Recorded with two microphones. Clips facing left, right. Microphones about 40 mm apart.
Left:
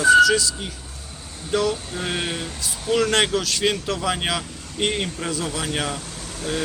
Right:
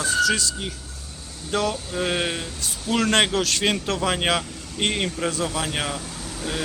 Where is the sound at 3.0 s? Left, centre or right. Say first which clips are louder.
Even; right.